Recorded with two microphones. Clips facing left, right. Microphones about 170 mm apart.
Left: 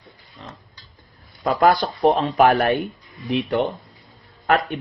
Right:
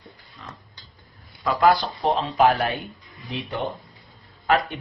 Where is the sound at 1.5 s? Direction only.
50° left (ahead or behind).